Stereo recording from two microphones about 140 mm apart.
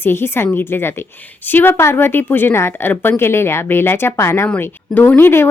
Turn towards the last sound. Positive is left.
turn(degrees=15)  # may be behind; listen again after turning